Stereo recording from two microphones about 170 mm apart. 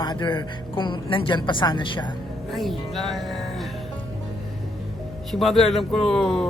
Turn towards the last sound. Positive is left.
turn(degrees=0)  # may be behind; listen again after turning